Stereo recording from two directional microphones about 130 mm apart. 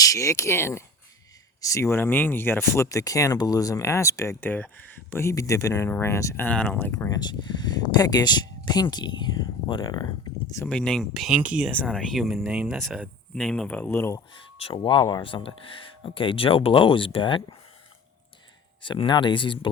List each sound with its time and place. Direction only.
0.0 s speech: 25° left (ahead or behind)
7.2 s speech: 35° left (ahead or behind)
10.7 s speech: 5° left (ahead or behind)
11.7 s speech: 5° left (ahead or behind)
14.6 s speech: 40° left (ahead or behind)
18.8 s speech: 40° left (ahead or behind)